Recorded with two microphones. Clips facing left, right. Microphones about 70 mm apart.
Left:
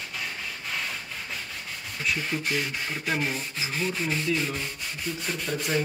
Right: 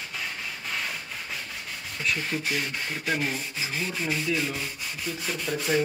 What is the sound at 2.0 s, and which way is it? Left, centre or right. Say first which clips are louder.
Speech: even; centre.